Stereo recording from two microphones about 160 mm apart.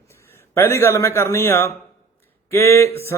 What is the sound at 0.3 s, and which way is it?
A man's voice, 15° left (ahead or behind).